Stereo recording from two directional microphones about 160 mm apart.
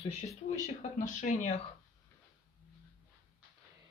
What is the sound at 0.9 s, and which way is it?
Speech, 50° left (ahead or behind).